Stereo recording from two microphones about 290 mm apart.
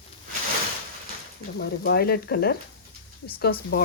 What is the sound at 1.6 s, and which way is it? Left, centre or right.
Speech, left.